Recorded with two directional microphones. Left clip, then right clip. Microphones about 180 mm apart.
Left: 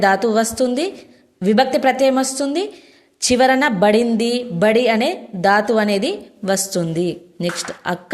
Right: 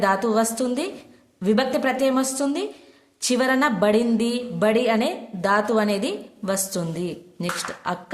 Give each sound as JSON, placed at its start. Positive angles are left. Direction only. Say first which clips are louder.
{"t": 0.0, "sound": "a woman's voice", "louder": "left 5 dB", "side_deg": 20}